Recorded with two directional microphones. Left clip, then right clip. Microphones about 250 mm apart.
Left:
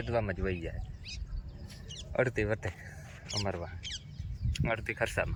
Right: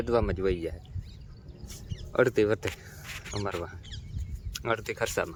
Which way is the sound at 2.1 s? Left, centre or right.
Centre.